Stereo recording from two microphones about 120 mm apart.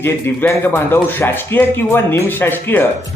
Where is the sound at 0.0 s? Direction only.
20° left (ahead or behind).